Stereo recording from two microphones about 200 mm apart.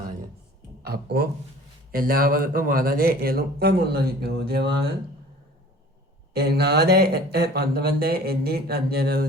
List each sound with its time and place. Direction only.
0.9 s speech: 50° right (ahead or behind)
6.3 s speech: 55° right (ahead or behind)